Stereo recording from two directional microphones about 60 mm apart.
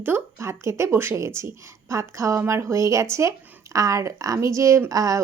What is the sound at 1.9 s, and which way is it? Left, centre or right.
A woman's voice, right.